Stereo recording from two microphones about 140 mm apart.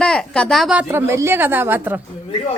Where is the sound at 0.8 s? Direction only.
15° right (ahead or behind).